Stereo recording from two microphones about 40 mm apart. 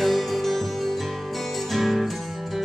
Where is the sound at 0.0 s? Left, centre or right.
Centre.